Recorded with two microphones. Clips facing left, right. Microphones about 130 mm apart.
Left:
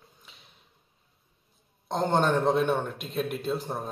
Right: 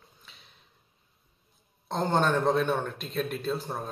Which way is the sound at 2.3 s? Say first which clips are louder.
Left 1 dB; 20° left (ahead or behind).